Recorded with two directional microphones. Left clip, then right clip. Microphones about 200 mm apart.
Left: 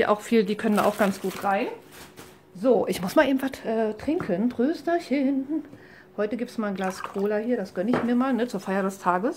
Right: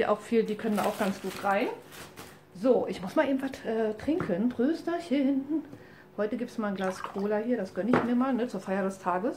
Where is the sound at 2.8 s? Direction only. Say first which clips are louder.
Left 6 dB; 45° left (ahead or behind).